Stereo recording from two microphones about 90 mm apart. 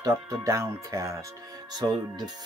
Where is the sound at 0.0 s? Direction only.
40° right (ahead or behind).